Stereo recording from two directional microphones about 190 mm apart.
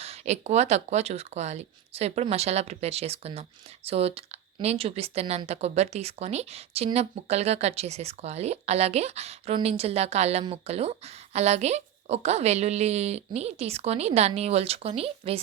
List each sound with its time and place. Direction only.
0.0 s a woman's voice: 35° right (ahead or behind)